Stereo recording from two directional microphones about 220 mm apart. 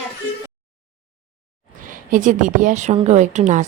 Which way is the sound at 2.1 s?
35° right (ahead or behind).